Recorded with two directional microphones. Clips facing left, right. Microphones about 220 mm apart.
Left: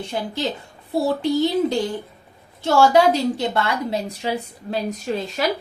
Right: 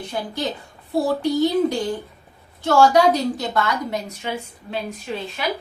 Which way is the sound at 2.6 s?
25° left (ahead or behind).